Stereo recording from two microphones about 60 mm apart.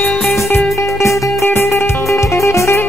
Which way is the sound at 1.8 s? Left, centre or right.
Left.